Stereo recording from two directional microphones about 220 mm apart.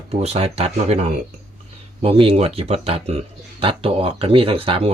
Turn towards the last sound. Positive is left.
turn(degrees=-25)  # may be behind; listen again after turning